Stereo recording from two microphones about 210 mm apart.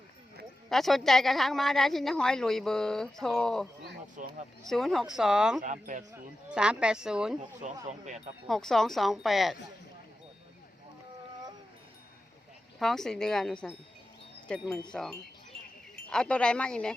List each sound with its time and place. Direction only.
0.7 s a woman's voice: centre (ahead or behind)
4.2 s speech: 40° right (ahead or behind)
4.6 s a woman's voice: centre (ahead or behind)
5.6 s speech: 35° right (ahead or behind)
6.1 s a woman's voice: 5° right (ahead or behind)
7.6 s speech: 35° right (ahead or behind)
8.4 s a woman's voice: centre (ahead or behind)
12.8 s a woman's voice: centre (ahead or behind)